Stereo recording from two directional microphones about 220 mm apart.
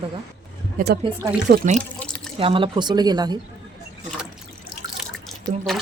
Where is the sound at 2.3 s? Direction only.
25° right (ahead or behind).